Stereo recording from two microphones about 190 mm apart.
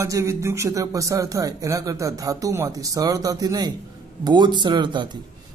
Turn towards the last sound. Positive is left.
turn(degrees=-25)  # may be behind; listen again after turning